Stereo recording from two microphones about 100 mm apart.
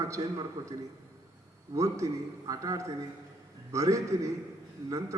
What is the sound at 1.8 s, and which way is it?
A man's voice, 35° right (ahead or behind).